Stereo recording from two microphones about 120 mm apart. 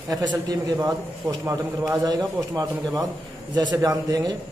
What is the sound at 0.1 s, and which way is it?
A man's voice, 30° right (ahead or behind).